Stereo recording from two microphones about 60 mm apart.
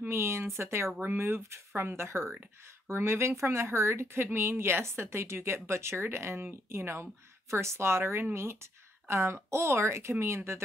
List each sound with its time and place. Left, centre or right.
0.1 s speech: right